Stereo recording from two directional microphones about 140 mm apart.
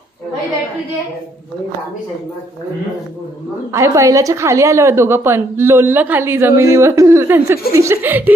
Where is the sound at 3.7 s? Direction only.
20° right (ahead or behind).